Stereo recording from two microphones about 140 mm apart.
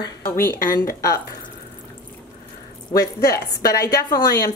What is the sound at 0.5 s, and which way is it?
Speech, 90° left.